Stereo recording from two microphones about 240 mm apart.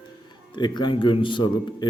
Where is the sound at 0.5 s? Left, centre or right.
Centre.